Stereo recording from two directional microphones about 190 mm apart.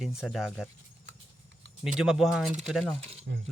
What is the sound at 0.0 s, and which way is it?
Speech, centre (ahead or behind).